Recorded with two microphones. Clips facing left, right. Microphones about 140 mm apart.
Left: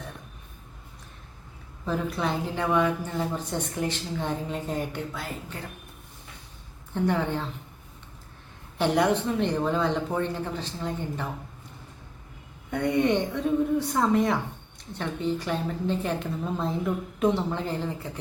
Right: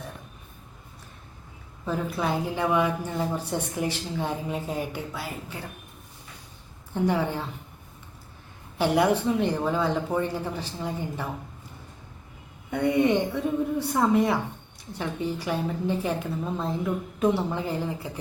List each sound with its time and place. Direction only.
1.8 s speech: 5° right (ahead or behind)
6.9 s speech: 10° right (ahead or behind)
8.8 s speech: 5° right (ahead or behind)
12.7 s a woman's voice: 5° right (ahead or behind)